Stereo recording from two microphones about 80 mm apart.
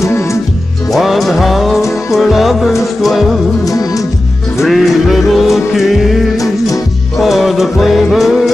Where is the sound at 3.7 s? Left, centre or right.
Left.